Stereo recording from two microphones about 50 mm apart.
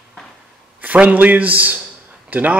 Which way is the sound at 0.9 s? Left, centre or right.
Right.